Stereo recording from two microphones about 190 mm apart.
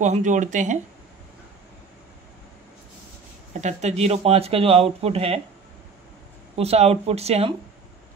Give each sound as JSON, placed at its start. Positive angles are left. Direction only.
{"t": 0.0, "sound": "speech", "side_deg": -40}
{"t": 3.6, "sound": "speech", "side_deg": -35}
{"t": 6.5, "sound": "speech", "side_deg": -35}